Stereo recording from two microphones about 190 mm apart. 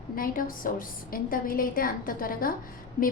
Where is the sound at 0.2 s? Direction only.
45° left (ahead or behind).